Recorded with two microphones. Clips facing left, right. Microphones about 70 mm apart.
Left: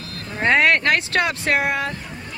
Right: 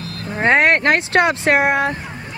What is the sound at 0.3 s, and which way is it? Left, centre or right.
Speech, right.